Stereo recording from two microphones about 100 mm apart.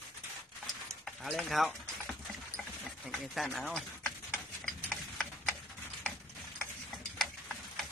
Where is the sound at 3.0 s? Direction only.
Centre (ahead or behind).